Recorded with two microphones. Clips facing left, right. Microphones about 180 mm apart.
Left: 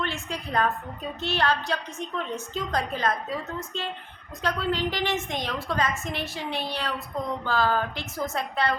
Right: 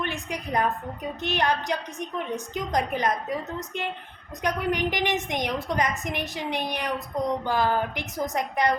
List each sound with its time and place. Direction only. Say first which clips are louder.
0.0 s a woman's voice: right 1 dB; 15° right (ahead or behind)